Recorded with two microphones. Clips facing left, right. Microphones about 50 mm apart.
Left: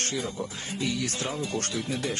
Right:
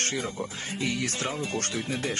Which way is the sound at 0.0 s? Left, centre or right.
Right.